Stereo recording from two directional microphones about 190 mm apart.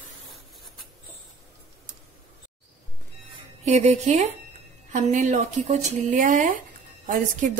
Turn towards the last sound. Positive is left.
turn(degrees=-45)  # may be behind; listen again after turning